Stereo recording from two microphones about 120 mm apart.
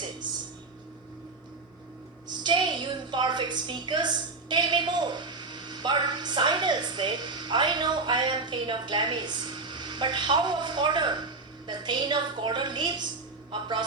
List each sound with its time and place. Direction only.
2.4 s a woman's voice: 40° right (ahead or behind)